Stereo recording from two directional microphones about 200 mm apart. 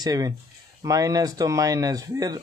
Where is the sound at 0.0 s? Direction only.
20° right (ahead or behind).